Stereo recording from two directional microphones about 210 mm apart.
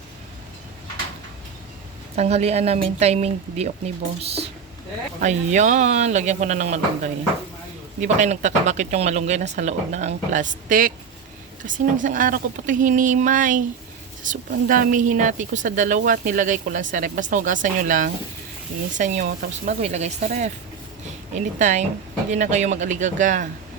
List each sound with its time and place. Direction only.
2.1 s speech: 30° right (ahead or behind)